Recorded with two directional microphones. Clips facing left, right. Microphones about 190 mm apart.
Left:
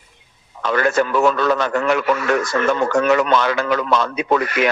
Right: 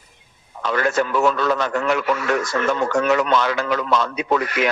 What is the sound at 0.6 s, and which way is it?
A man's voice, 60° left (ahead or behind).